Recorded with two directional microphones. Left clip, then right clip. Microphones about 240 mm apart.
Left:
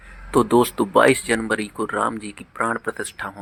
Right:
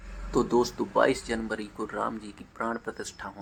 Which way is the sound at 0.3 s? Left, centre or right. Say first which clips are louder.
Left 8 dB; left.